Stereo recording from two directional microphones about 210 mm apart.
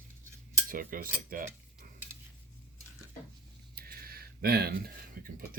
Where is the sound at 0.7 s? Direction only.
40° right (ahead or behind).